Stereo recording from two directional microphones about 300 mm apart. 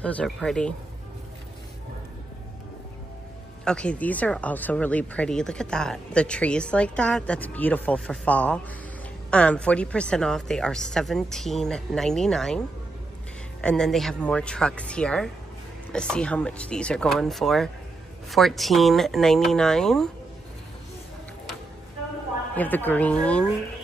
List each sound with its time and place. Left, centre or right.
0.0 s speech: centre
3.6 s speech: centre
22.6 s speech: centre